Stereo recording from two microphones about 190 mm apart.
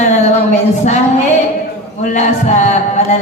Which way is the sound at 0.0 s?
40° left (ahead or behind).